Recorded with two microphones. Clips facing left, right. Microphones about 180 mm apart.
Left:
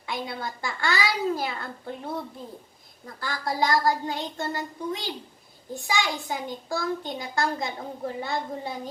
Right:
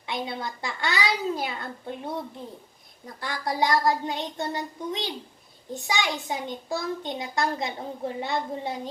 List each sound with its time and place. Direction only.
0.1 s a child's voice: 20° right (ahead or behind)
3.2 s a child's voice: 20° right (ahead or behind)